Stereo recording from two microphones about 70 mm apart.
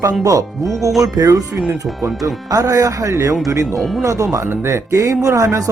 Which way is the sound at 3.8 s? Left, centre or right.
Centre.